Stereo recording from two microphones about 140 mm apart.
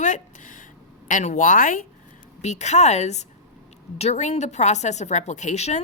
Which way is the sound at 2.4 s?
55° left (ahead or behind).